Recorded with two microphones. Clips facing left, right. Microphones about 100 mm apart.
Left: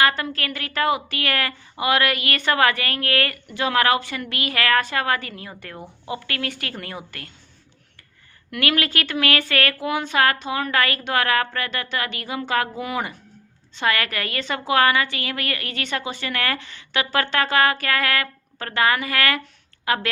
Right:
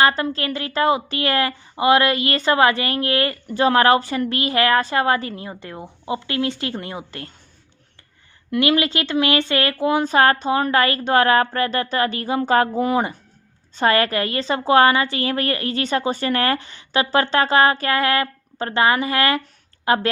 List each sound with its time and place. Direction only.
0.0 s a woman's voice: 30° right (ahead or behind)
3.4 s a woman's voice: 35° right (ahead or behind)
8.4 s a woman's voice: 25° right (ahead or behind)